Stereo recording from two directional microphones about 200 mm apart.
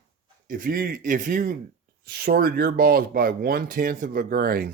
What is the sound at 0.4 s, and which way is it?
Speech, 45° right (ahead or behind).